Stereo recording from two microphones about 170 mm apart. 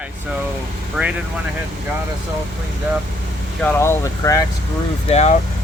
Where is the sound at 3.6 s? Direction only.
15° left (ahead or behind).